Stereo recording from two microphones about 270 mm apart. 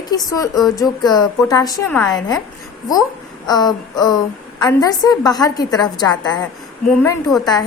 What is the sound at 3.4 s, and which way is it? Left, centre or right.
A woman's voice, centre.